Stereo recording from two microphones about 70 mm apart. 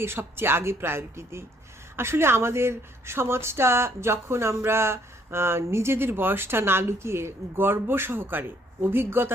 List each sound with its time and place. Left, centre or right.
0.0 s speech: right